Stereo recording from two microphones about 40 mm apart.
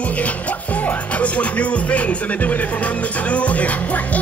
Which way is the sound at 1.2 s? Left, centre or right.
Left.